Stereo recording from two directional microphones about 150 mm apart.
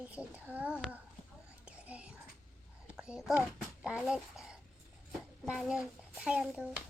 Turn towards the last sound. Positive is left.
turn(degrees=-5)  # may be behind; listen again after turning